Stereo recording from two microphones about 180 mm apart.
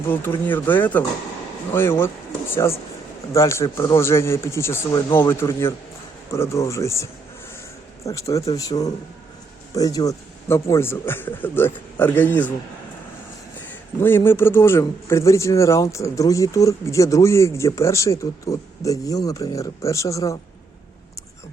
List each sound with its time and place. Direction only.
0.1 s speech: 10° left (ahead or behind)
3.3 s speech: 15° left (ahead or behind)
14.3 s speech: 15° left (ahead or behind)